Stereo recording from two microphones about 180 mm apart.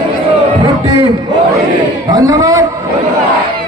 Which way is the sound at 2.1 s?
20° right (ahead or behind).